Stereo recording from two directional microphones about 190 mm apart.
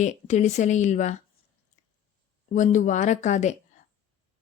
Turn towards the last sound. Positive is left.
turn(degrees=40)  # may be behind; listen again after turning